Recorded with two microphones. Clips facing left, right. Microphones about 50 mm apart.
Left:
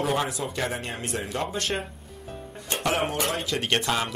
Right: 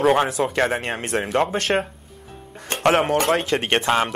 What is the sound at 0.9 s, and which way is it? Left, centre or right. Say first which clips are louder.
Speech: right 7 dB; right.